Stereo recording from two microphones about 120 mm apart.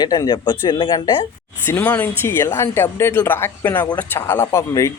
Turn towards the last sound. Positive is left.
turn(degrees=25)  # may be behind; listen again after turning